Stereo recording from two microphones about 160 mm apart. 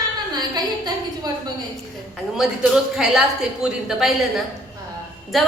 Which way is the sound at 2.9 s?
Centre (ahead or behind).